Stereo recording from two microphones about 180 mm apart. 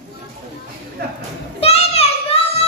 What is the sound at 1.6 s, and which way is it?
Child singing, 35° left (ahead or behind).